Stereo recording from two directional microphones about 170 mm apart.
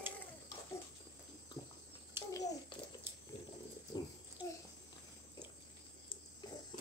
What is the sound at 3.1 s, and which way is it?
Water, 15° right (ahead or behind).